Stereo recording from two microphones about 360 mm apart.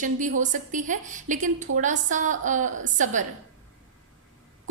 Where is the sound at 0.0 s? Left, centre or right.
Right.